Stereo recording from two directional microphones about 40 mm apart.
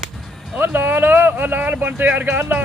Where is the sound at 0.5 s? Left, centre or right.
Right.